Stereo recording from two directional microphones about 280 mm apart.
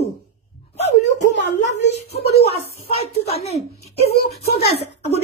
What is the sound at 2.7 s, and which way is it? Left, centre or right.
Speech, left.